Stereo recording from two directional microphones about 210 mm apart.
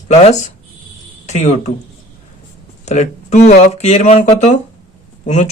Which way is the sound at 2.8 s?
30° left (ahead or behind).